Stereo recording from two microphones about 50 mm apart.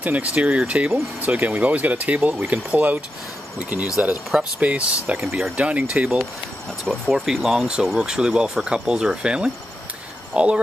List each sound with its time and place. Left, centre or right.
0.0 s speech: right
4.4 s speech: right
6.9 s speech: centre; by 10.6 s right